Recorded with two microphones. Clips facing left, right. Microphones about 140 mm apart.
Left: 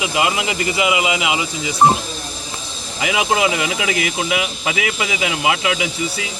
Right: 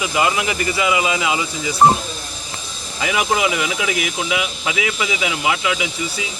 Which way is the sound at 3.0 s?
20° left (ahead or behind).